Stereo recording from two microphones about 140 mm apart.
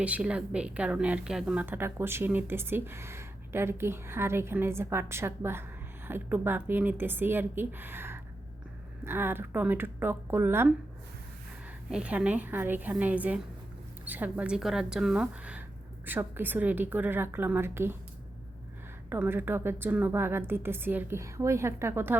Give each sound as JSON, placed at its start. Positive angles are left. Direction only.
{"t": 0.0, "sound": "speech", "side_deg": -10}
{"t": 1.6, "sound": "speech", "side_deg": -15}
{"t": 11.9, "sound": "speech", "side_deg": -5}
{"t": 19.1, "sound": "speech", "side_deg": -15}